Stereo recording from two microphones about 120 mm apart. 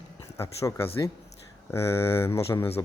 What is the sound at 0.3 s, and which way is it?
Speech, 20° left (ahead or behind).